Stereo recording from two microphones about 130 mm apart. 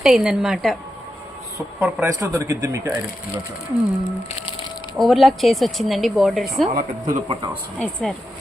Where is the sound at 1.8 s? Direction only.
5° right (ahead or behind).